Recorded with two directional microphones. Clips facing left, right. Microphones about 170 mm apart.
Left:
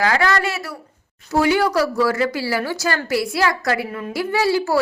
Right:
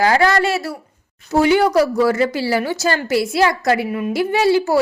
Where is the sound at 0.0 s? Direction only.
30° right (ahead or behind).